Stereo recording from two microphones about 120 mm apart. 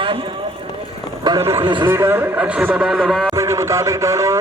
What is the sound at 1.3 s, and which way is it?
Speech, 35° right (ahead or behind).